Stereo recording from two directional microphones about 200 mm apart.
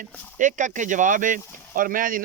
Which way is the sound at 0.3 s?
40° right (ahead or behind).